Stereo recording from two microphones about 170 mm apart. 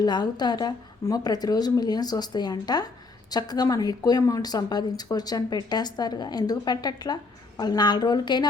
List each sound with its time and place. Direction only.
0.0 s a woman's voice: 25° left (ahead or behind)